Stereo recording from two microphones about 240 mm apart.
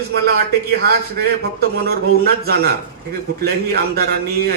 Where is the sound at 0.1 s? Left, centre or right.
Right.